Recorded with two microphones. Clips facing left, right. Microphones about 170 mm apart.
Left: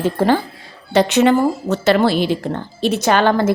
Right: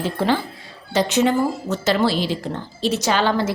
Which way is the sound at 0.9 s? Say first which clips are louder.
Left 5 dB; 65° left (ahead or behind).